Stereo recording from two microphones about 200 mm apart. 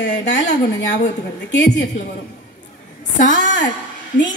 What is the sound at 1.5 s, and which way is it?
Speech, 60° left (ahead or behind).